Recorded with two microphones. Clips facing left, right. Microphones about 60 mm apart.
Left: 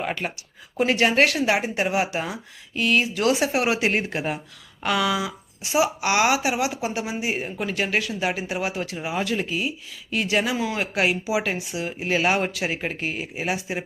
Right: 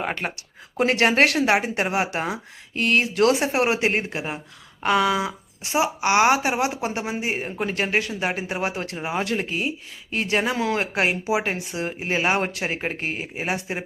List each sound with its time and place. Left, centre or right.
0.0 s speech: right
10.9 s speech: right
11.9 s speech: right